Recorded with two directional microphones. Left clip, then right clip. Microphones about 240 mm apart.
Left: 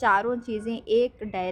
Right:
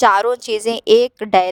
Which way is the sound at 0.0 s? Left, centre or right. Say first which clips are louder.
Right 9 dB; right.